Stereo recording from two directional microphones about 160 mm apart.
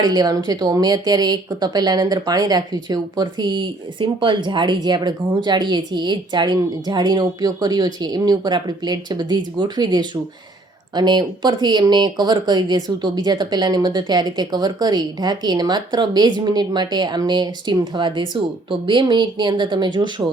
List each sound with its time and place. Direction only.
0.0 s speech: 25° right (ahead or behind)